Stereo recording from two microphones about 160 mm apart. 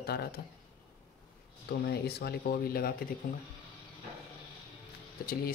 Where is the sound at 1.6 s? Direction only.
85° left.